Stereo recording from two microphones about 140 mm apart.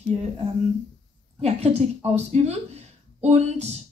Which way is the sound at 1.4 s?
50° right (ahead or behind).